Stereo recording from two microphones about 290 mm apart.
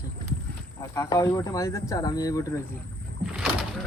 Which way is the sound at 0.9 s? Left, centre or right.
Centre.